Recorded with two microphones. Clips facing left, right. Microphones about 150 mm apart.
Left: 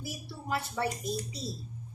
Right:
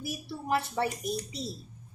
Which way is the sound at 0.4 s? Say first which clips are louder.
Right 4 dB; 25° right (ahead or behind).